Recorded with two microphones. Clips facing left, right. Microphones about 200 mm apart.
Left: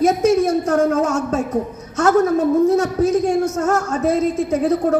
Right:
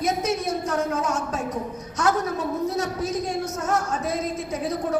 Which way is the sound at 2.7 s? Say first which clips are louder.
Left 10 dB; 50° left (ahead or behind).